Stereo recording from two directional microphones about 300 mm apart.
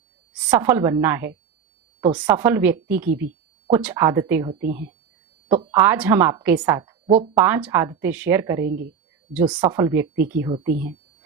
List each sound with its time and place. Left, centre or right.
0.3 s a woman's voice: centre
8.6 s a woman's voice: right
9.5 s a woman's voice: centre